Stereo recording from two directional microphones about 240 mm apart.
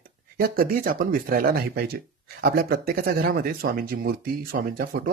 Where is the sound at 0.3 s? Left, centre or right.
Right.